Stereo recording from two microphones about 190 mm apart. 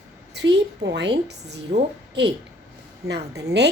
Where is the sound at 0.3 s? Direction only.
65° right (ahead or behind).